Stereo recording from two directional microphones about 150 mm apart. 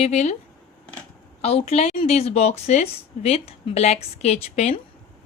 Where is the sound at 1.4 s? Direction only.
45° left (ahead or behind).